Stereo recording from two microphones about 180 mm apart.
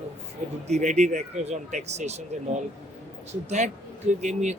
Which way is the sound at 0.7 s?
40° right (ahead or behind).